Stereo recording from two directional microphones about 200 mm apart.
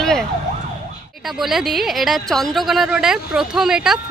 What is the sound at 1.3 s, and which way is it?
Speech, centre (ahead or behind).